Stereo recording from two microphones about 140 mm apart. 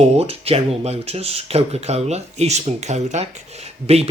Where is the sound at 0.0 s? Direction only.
45° right (ahead or behind).